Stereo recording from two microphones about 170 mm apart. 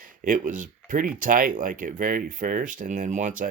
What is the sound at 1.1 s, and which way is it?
Speech, 55° right (ahead or behind).